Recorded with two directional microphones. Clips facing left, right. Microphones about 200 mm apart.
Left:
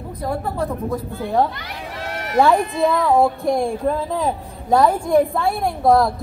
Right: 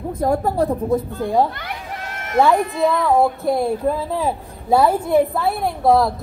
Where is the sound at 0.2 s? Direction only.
45° right (ahead or behind).